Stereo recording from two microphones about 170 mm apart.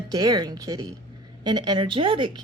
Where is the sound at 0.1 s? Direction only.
20° right (ahead or behind).